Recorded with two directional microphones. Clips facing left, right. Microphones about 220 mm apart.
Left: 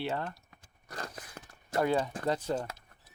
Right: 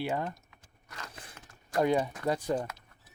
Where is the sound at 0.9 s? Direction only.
35° left (ahead or behind).